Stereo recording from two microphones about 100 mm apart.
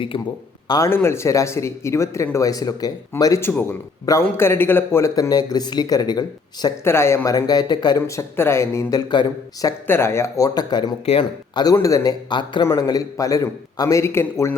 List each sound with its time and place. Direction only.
0.1 s speech: 60° left (ahead or behind)
0.9 s speech: 25° left (ahead or behind)
3.4 s speech: 20° left (ahead or behind)
5.1 s speech: 40° left (ahead or behind)
6.8 s speech: 25° left (ahead or behind); by 7.9 s 45° left (ahead or behind)
7.9 s speech: 30° left (ahead or behind)
9.8 s speech: 25° left (ahead or behind); by 11.7 s 45° left (ahead or behind)
11.7 s speech: 35° left (ahead or behind)
12.3 s speech: 50° left (ahead or behind)
12.7 s speech: 40° left (ahead or behind)